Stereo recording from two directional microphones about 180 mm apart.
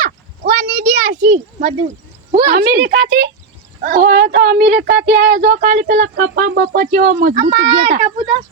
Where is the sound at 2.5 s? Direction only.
60° right (ahead or behind).